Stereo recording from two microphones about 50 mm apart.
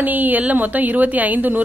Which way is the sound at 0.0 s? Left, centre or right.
Right.